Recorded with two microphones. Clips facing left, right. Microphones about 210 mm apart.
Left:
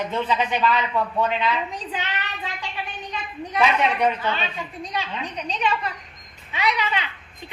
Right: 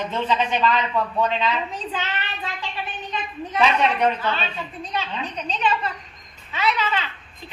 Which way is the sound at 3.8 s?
10° left (ahead or behind).